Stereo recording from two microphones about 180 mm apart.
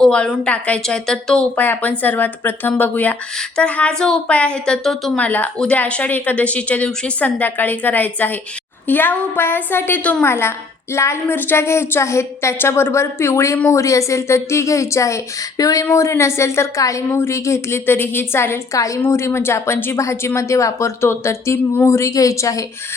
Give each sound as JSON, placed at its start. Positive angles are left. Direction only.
{"t": 0.0, "sound": "a woman's voice", "side_deg": 5}